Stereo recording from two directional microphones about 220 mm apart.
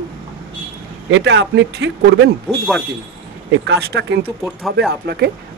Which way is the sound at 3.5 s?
50° right (ahead or behind).